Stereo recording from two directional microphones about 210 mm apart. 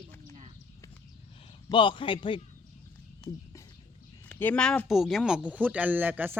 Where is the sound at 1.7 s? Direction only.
25° left (ahead or behind).